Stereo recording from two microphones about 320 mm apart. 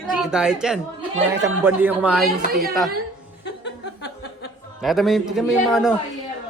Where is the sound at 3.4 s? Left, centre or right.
Left.